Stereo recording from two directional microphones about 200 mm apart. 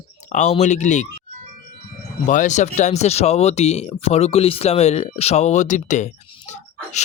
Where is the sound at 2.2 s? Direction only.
40° left (ahead or behind).